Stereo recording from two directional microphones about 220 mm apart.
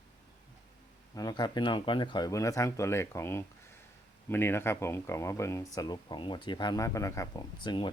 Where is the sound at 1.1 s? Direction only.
15° left (ahead or behind).